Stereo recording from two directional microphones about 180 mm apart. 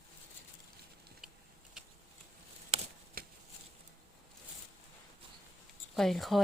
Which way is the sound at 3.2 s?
55° right (ahead or behind).